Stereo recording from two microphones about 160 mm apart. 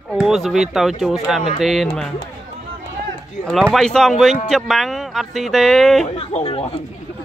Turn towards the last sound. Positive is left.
turn(degrees=35)  # may be behind; listen again after turning